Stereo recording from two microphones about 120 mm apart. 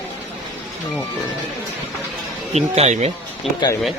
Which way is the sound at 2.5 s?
65° right (ahead or behind).